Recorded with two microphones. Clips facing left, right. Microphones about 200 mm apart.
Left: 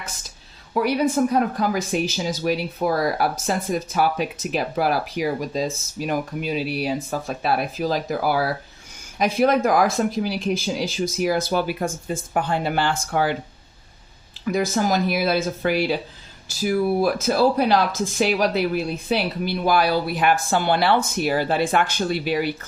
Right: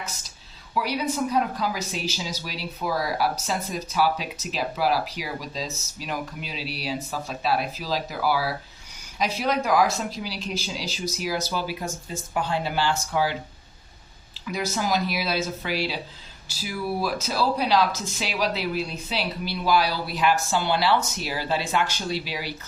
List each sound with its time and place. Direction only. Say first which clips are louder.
0.7 s speech: left 6 dB; 50° left (ahead or behind)
14.4 s speech: left 6 dB; 50° left (ahead or behind)